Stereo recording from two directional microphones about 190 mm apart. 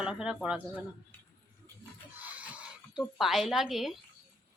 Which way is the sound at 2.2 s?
10° right (ahead or behind).